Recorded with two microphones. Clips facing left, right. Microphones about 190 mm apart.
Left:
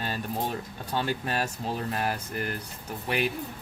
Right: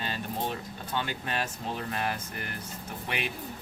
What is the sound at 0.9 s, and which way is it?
Speech, 40° left (ahead or behind).